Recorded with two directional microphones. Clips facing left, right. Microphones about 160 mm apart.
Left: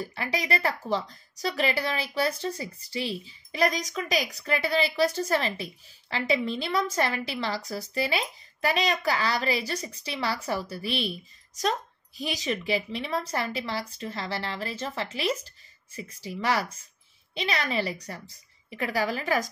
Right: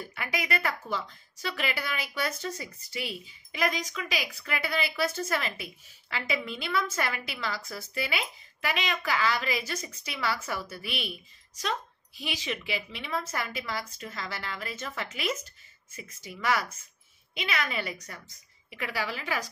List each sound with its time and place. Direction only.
0.0 s a woman's voice: 35° left (ahead or behind)